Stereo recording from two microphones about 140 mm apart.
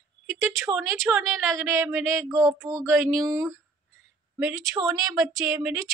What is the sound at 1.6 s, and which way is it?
Speech, 15° right (ahead or behind).